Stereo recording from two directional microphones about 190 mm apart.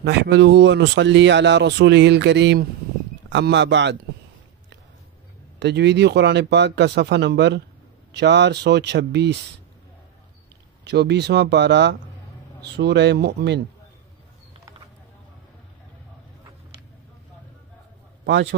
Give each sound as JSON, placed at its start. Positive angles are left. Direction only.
{"t": 0.0, "sound": "speech", "side_deg": -65}
{"t": 5.6, "sound": "speech", "side_deg": -60}
{"t": 10.8, "sound": "speech", "side_deg": -60}
{"t": 18.2, "sound": "a man's voice", "side_deg": -70}